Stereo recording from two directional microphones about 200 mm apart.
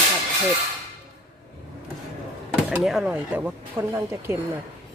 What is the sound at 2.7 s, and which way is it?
Speech, centre (ahead or behind).